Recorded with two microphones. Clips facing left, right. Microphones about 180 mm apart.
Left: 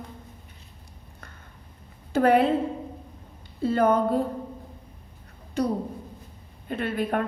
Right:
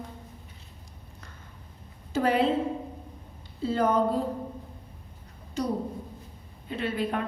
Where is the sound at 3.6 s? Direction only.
60° left (ahead or behind).